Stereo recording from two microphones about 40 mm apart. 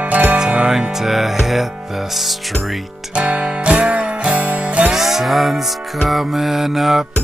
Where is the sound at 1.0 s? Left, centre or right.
Centre.